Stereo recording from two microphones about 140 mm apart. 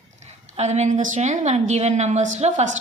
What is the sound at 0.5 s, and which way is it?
A woman's voice, 55° right (ahead or behind).